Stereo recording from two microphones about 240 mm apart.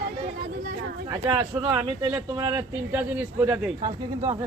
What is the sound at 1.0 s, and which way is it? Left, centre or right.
A man's voice, centre.